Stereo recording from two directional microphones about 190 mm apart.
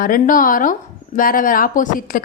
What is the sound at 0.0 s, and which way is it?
Speech, 45° left (ahead or behind).